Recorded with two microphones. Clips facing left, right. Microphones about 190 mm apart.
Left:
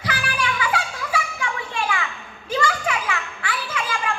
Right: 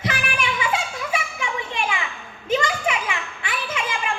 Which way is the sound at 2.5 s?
20° right (ahead or behind).